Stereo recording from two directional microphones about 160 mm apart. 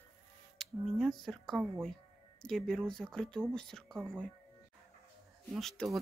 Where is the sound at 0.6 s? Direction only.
5° left (ahead or behind).